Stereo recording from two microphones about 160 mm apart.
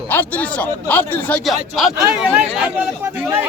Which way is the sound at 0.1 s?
10° left (ahead or behind).